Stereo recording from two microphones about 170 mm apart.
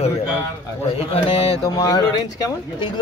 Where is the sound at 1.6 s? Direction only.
20° left (ahead or behind).